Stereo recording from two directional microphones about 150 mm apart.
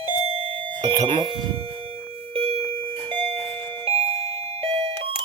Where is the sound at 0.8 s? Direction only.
25° right (ahead or behind).